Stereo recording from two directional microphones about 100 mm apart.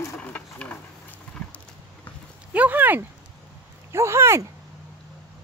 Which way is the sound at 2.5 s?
15° right (ahead or behind).